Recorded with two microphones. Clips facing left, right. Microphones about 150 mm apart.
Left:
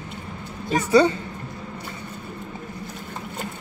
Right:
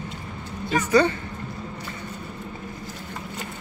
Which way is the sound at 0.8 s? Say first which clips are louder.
Left 2 dB; 25° left (ahead or behind).